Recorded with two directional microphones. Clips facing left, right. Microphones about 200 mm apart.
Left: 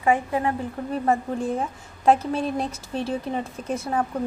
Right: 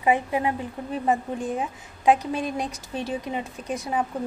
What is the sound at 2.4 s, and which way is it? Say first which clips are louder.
Speech: left 2 dB; 30° left (ahead or behind).